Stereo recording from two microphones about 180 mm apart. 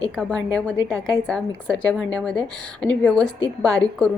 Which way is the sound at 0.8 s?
20° right (ahead or behind).